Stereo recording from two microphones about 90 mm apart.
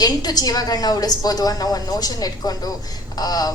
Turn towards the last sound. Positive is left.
turn(degrees=45)  # may be behind; listen again after turning